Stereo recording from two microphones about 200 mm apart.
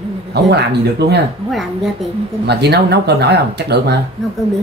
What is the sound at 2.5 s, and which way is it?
Speech, 55° right (ahead or behind).